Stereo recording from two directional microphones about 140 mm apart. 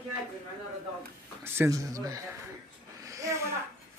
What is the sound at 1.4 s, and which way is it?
Speech, 15° right (ahead or behind).